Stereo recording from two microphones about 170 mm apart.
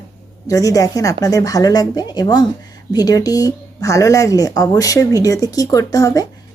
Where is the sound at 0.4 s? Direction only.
20° left (ahead or behind).